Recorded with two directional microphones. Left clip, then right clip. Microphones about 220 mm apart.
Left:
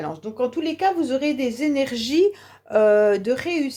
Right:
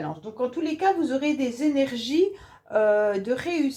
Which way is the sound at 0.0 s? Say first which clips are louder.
Left 4 dB; 40° left (ahead or behind).